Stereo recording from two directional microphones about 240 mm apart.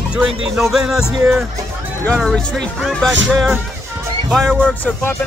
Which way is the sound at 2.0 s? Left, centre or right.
Centre.